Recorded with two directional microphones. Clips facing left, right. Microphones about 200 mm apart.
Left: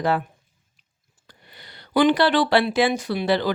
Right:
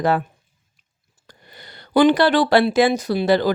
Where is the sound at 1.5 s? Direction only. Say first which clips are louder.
Right 4 dB; 45° right (ahead or behind).